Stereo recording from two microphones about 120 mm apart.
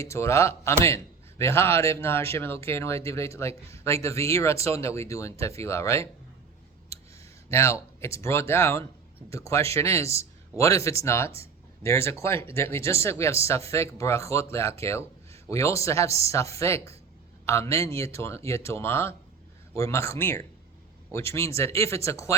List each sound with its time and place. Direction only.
0.0 s a man's voice: 25° left (ahead or behind)
6.9 s a sound: 25° left (ahead or behind)
7.5 s a man's voice: 25° left (ahead or behind)